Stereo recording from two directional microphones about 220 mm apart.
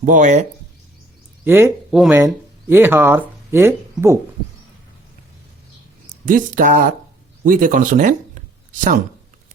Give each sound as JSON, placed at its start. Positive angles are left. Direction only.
{"t": 0.0, "sound": "speech", "side_deg": -35}
{"t": 1.5, "sound": "speech", "side_deg": -10}
{"t": 6.2, "sound": "speech", "side_deg": -35}